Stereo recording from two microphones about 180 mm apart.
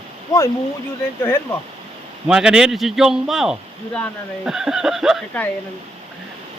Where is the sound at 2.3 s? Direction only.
5° right (ahead or behind).